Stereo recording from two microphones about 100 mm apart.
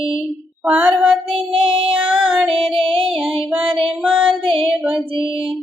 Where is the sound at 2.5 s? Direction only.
90° right.